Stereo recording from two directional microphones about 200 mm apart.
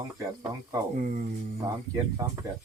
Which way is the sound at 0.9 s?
40° right (ahead or behind).